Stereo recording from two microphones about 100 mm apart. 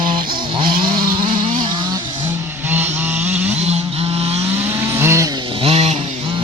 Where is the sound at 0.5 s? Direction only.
55° right (ahead or behind).